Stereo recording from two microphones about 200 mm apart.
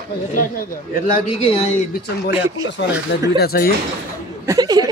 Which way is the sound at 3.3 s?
50° left (ahead or behind).